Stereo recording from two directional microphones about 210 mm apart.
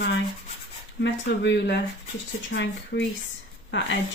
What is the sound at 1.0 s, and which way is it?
Speech, 55° left (ahead or behind).